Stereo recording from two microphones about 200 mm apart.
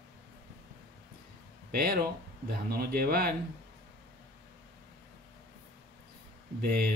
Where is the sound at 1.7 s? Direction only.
50° right (ahead or behind).